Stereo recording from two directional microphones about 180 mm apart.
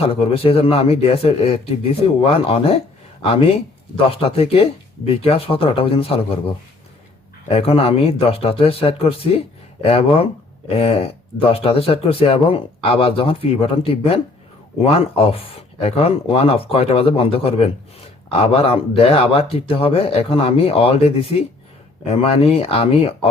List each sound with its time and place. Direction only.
0.1 s speech: 30° left (ahead or behind)
7.4 s speech: 35° left (ahead or behind)